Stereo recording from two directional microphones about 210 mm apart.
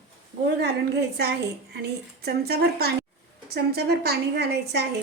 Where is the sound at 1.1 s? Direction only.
50° right (ahead or behind).